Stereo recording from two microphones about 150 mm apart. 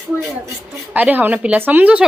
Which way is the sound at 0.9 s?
10° right (ahead or behind).